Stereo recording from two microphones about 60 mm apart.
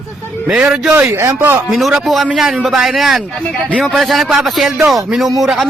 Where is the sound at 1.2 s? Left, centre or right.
Right.